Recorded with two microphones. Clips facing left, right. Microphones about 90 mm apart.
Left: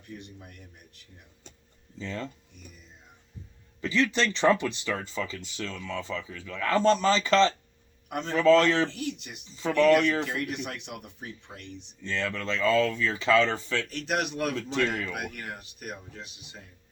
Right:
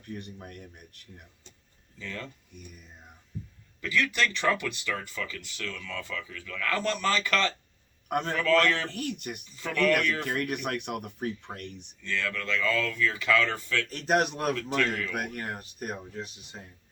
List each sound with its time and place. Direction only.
0.1 s speech: 50° right (ahead or behind)
2.0 s speech: 25° left (ahead or behind)
3.8 s speech: 25° left (ahead or behind)
8.0 s a man's voice: 50° right (ahead or behind)
8.3 s speech: 20° left (ahead or behind)
8.9 s speech: 55° right (ahead or behind)
9.5 s speech: 20° left (ahead or behind)
10.2 s speech: 55° right (ahead or behind)
12.0 s speech: 25° left (ahead or behind)
13.9 s speech: 40° right (ahead or behind)
14.5 s speech: 25° left (ahead or behind)
15.1 s speech: 40° right (ahead or behind)